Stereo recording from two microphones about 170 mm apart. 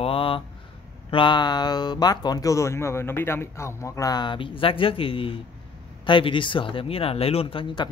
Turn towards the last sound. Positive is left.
turn(degrees=30)  # may be behind; listen again after turning